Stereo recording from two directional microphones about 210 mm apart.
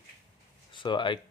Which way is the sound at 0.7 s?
25° left (ahead or behind).